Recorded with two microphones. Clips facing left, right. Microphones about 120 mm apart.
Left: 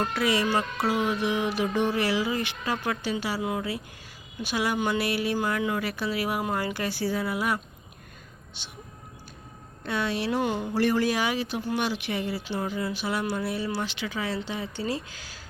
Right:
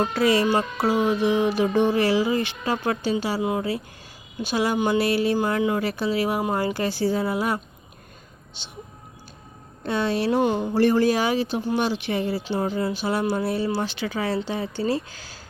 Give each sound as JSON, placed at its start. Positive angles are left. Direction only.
{"t": 0.1, "sound": "speech", "side_deg": -35}
{"t": 0.4, "sound": "music", "side_deg": -25}
{"t": 9.8, "sound": "speech", "side_deg": -30}